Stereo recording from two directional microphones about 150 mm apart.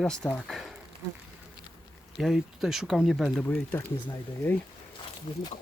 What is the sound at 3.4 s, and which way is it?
Speech, 10° left (ahead or behind).